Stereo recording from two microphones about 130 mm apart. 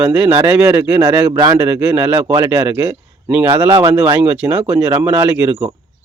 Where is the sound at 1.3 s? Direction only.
35° right (ahead or behind).